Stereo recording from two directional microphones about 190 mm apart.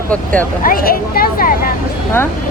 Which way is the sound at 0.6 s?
50° left (ahead or behind).